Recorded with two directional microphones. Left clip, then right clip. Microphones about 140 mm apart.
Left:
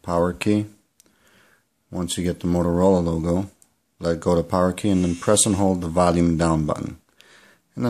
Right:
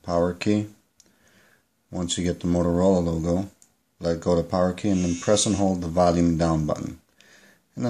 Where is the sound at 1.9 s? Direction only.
25° left (ahead or behind).